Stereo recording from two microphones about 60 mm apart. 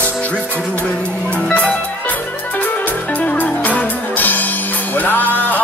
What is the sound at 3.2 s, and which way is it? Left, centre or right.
Music, left.